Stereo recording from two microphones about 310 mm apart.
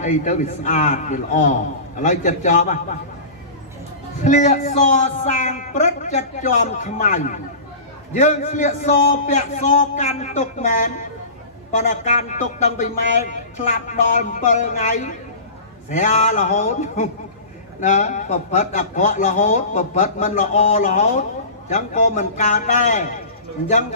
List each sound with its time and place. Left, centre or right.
0.0 s a man's voice: left
4.2 s a man's voice: left